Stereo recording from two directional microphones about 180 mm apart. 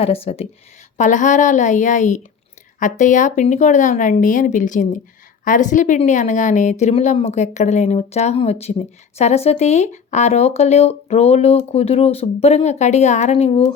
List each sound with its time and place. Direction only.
0.0 s speech: 35° left (ahead or behind)